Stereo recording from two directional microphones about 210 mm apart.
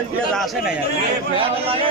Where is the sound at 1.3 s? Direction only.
25° right (ahead or behind).